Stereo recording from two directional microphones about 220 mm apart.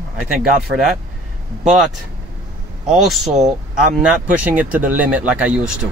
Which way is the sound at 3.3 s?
30° right (ahead or behind).